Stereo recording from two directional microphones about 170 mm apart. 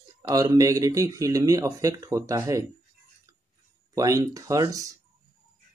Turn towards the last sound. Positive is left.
turn(degrees=-20)  # may be behind; listen again after turning